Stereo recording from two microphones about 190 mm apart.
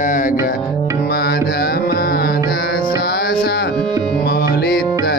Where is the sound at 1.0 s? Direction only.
55° left (ahead or behind).